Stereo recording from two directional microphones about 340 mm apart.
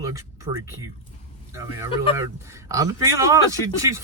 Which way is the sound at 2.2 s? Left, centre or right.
Centre.